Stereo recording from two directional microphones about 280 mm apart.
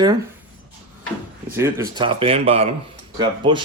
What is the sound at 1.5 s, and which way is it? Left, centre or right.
Speech, centre.